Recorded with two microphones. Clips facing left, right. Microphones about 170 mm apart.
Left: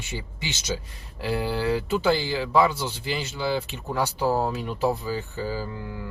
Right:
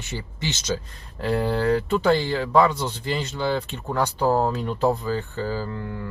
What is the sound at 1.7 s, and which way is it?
Speech, 10° left (ahead or behind).